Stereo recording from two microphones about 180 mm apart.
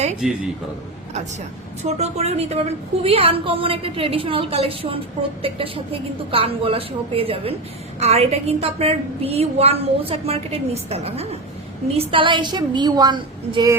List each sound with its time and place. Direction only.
0.2 s a man's voice: centre (ahead or behind)
1.8 s a woman's voice: 40° right (ahead or behind)